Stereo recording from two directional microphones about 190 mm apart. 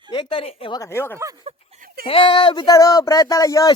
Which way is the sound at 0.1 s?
25° left (ahead or behind).